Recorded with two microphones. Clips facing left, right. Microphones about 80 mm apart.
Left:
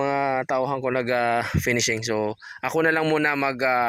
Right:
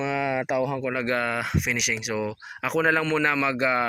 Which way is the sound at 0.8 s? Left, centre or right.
Left.